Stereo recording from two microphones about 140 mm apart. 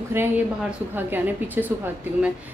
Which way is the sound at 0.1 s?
15° right (ahead or behind).